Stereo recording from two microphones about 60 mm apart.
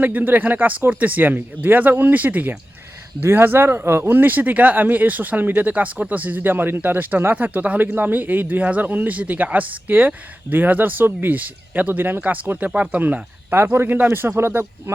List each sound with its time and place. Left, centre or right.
0.0 s speech: right